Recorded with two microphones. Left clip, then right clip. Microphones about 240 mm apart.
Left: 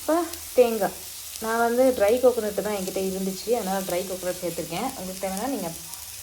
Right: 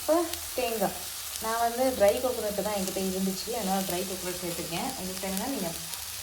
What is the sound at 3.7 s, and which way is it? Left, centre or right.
Frying, left.